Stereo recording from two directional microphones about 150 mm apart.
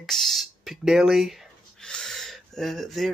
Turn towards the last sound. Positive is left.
turn(degrees=0)  # may be behind; listen again after turning